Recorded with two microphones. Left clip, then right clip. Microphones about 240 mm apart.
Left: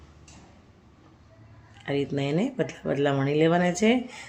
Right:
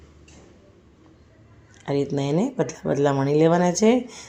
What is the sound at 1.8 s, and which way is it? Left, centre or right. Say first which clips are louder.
Speech: right 3 dB; centre.